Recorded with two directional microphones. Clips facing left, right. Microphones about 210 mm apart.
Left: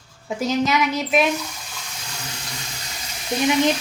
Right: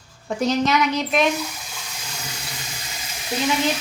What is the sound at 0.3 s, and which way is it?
Speech, centre (ahead or behind).